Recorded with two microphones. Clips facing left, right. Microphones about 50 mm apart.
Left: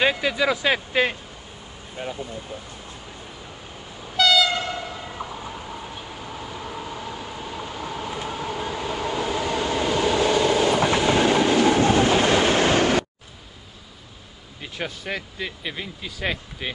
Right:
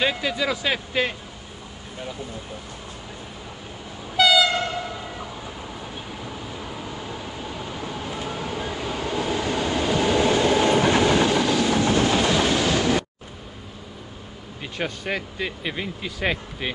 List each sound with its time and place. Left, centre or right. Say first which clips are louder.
0.0 s speech: left 3 dB; centre
4.2 s train: right 1 dB; centre
6.7 s vehicle: left 1 dB; centre
7.5 s train: left 2 dB; centre
9.1 s vehicle: right 1 dB; centre
10.1 s train: right 1 dB; centre
11.2 s train: left 3 dB; left
14.6 s speech: right 2 dB; centre